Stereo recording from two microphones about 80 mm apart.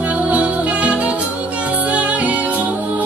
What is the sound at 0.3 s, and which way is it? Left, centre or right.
Music, centre.